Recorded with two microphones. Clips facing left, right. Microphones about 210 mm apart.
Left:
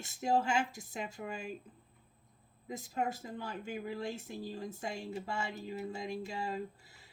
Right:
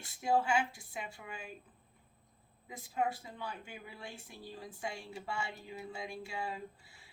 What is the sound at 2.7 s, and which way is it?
A woman's voice, 40° left (ahead or behind).